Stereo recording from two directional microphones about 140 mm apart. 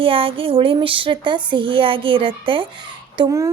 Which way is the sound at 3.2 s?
25° right (ahead or behind).